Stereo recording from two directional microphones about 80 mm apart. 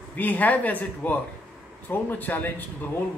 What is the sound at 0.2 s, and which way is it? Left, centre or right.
A man's voice, centre.